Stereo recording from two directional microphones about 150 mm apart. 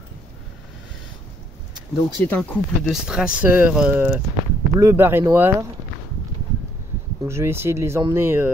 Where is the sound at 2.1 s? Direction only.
10° left (ahead or behind).